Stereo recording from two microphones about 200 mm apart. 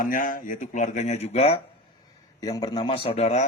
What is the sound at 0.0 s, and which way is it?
A man's voice, 40° left (ahead or behind).